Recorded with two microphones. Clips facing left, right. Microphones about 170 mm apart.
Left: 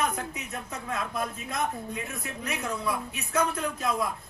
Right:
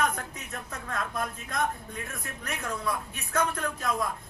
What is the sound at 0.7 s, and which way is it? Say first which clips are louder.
A man's voice: left 1 dB; 10° left (ahead or behind).